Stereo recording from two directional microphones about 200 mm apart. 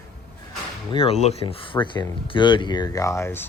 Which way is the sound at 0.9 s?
30° left (ahead or behind).